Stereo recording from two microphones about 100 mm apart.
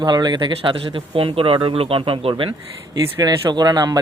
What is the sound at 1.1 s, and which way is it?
Speech, 65° right (ahead or behind).